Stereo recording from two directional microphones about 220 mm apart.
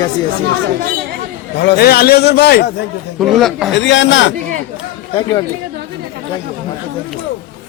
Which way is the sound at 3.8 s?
55° left (ahead or behind).